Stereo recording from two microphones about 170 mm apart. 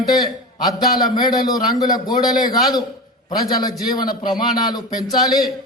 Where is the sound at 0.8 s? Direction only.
25° left (ahead or behind).